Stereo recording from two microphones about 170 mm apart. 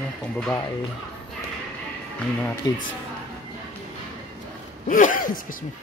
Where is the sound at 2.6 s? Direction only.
20° left (ahead or behind).